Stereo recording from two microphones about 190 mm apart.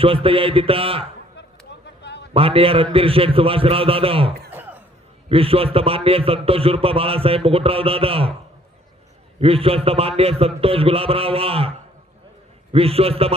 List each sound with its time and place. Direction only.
0.0 s a man's voice: 30° right (ahead or behind)
2.0 s a sound: 65° left (ahead or behind)
2.3 s a man's voice: 30° right (ahead or behind)
4.5 s a sound: 10° right (ahead or behind)
5.3 s a man's voice: 30° right (ahead or behind)
9.4 s a man's voice: 30° right (ahead or behind)
12.7 s a man's voice: 30° right (ahead or behind)